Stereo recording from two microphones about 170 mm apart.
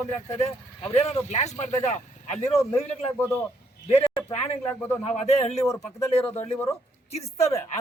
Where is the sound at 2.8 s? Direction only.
10° left (ahead or behind).